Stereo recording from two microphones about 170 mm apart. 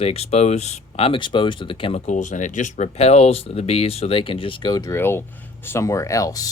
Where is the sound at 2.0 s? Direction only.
45° left (ahead or behind); by 6.4 s 20° left (ahead or behind).